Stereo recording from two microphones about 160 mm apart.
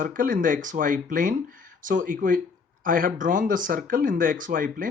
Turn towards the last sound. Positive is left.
turn(degrees=-60)  # may be behind; listen again after turning